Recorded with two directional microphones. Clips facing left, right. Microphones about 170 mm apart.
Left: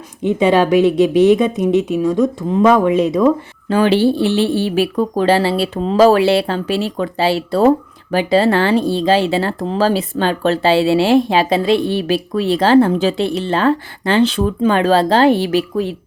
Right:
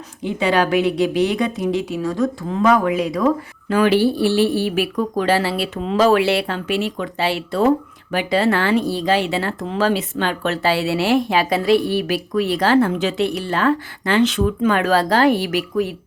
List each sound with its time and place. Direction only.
0.2 s speech: 20° left (ahead or behind)